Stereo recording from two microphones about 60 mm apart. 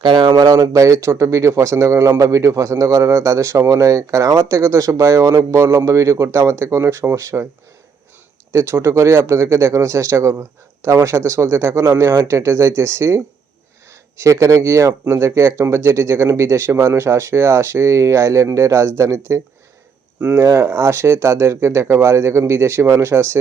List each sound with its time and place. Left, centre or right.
0.3 s a man's voice: right
5.5 s speech: right
5.8 s speech: right
8.5 s a man's voice: right
20.3 s speech: right